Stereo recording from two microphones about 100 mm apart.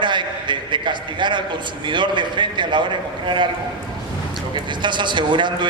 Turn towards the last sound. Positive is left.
turn(degrees=-50)  # may be behind; listen again after turning